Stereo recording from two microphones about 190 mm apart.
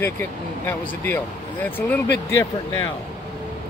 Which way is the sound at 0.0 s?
10° left (ahead or behind).